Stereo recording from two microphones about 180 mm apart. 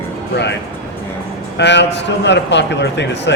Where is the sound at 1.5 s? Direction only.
75° left (ahead or behind).